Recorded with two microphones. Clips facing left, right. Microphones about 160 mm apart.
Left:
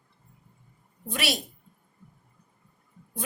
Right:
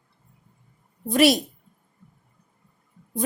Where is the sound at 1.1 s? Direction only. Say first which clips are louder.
Right 13 dB; 45° right (ahead or behind).